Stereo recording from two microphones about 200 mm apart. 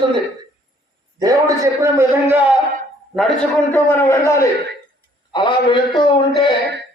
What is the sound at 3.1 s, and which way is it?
A man's voice, 5° left (ahead or behind).